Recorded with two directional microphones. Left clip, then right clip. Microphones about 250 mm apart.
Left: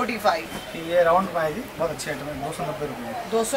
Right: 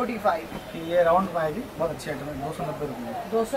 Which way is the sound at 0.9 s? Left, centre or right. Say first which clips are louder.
Left 2 dB; centre.